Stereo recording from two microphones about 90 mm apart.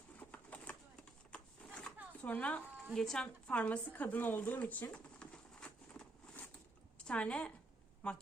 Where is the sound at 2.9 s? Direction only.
5° left (ahead or behind).